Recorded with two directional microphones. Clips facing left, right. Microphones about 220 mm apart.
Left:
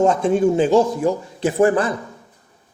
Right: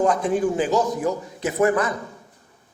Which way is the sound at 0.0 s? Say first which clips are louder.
Left 4 dB; 25° left (ahead or behind).